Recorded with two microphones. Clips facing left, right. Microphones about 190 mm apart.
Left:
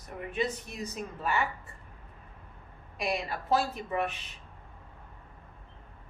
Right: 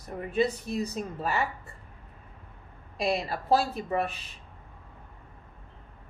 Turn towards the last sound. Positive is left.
turn(degrees=-35)  # may be behind; listen again after turning